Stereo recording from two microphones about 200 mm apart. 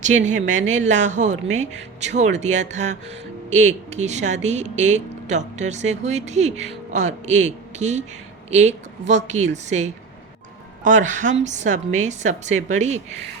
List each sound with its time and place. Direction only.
0.0 s speech: 35° right (ahead or behind)